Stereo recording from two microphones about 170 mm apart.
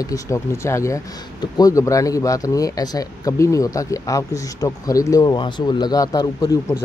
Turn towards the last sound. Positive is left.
turn(degrees=20)  # may be behind; listen again after turning